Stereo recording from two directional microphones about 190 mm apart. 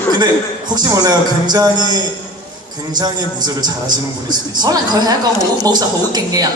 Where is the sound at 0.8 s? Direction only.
20° right (ahead or behind).